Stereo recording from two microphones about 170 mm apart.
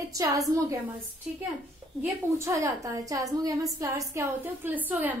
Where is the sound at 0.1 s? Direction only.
20° right (ahead or behind).